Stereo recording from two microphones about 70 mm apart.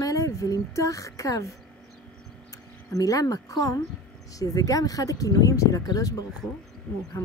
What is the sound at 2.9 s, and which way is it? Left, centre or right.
Speech, left.